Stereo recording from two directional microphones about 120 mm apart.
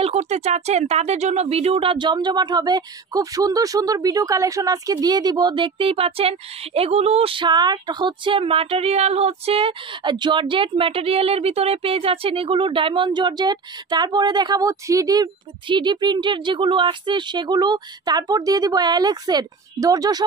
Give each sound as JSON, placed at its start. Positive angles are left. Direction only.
{"t": 0.0, "sound": "speech", "side_deg": -65}